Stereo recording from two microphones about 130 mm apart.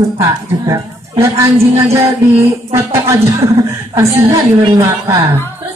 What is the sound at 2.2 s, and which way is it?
A man's voice, 20° right (ahead or behind).